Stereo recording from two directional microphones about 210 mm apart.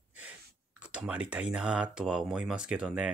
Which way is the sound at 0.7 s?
5° right (ahead or behind).